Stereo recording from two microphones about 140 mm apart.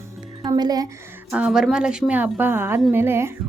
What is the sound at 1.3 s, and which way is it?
Speech, 10° right (ahead or behind).